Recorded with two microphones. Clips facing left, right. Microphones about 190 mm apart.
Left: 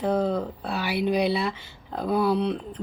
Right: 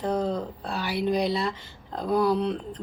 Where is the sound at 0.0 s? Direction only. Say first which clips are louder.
Left 3 dB; 5° left (ahead or behind).